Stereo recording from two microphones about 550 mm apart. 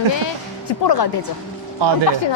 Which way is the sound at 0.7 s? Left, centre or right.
Left.